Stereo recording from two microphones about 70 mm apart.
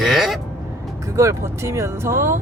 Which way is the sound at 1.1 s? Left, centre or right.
Right.